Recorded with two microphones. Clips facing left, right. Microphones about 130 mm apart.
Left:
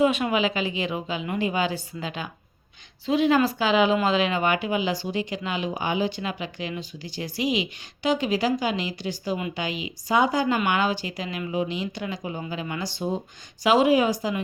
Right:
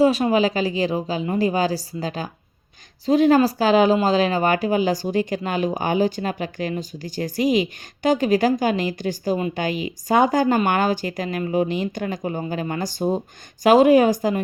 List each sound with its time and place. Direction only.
0.0 s a woman's voice: 35° right (ahead or behind)